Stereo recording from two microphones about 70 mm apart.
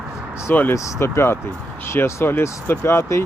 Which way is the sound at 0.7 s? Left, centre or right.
Left.